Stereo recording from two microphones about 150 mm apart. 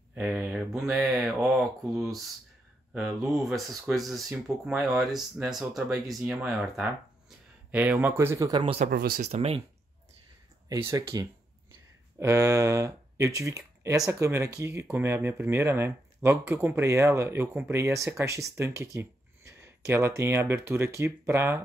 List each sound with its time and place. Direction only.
0.1 s speech: 10° right (ahead or behind)
2.9 s speech: 10° right (ahead or behind); by 8.7 s 30° right (ahead or behind)
8.8 s speech: 85° right
9.2 s speech: 45° right (ahead or behind)
10.7 s speech: 20° right (ahead or behind)